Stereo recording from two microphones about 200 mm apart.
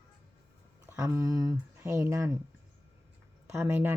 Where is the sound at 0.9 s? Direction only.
15° right (ahead or behind).